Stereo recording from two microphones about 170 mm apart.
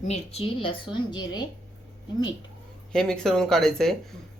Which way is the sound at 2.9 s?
5° left (ahead or behind).